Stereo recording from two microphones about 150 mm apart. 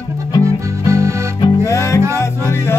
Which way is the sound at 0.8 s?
20° right (ahead or behind).